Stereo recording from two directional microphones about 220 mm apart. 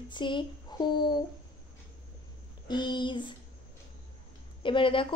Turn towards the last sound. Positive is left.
turn(degrees=25)  # may be behind; listen again after turning